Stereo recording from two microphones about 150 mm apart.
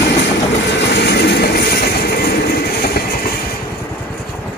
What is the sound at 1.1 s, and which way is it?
Vehicle, 90° left.